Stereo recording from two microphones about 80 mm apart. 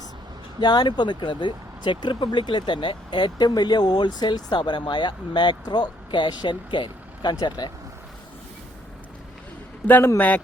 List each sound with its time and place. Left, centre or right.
0.6 s speech: left
7.4 s speech: left
9.8 s a man's voice: left